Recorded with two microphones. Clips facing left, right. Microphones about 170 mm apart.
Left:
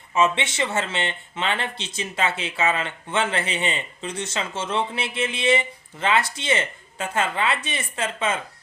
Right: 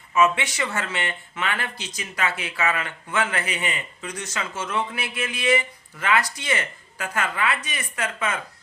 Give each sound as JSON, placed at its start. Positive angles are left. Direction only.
{"t": 0.1, "sound": "speech", "side_deg": 25}